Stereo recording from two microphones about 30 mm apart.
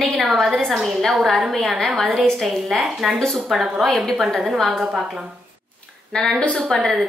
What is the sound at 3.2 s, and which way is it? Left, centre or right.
Speech, centre.